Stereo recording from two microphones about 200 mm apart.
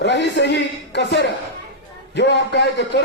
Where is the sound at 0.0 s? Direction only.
60° left (ahead or behind).